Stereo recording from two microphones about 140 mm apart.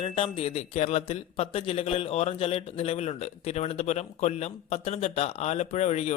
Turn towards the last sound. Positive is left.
turn(degrees=50)  # may be behind; listen again after turning